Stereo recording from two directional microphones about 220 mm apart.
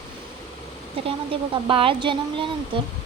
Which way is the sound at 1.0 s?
25° right (ahead or behind).